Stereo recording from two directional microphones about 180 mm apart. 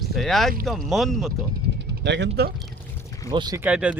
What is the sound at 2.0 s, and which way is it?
Speech, 75° right (ahead or behind).